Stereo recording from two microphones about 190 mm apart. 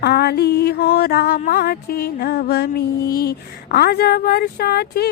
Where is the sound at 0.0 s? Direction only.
55° left (ahead or behind).